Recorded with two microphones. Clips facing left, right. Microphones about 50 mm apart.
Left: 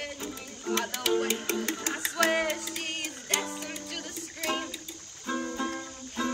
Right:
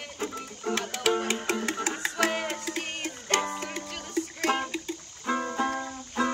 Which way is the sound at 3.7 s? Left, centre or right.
Right.